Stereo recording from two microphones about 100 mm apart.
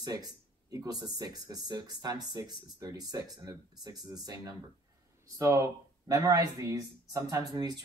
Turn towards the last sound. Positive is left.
turn(degrees=-40)  # may be behind; listen again after turning